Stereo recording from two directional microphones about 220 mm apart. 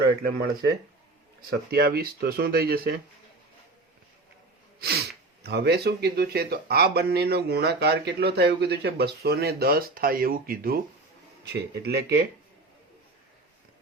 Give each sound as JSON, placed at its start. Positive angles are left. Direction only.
{"t": 0.2, "sound": "speech", "side_deg": -45}
{"t": 1.7, "sound": "speech", "side_deg": -45}
{"t": 4.8, "sound": "speech", "side_deg": -45}